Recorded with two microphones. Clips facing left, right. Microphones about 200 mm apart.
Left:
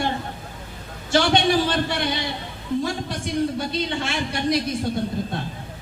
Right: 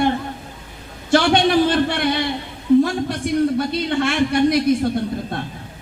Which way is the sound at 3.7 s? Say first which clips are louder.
Right 6 dB; 60° right (ahead or behind).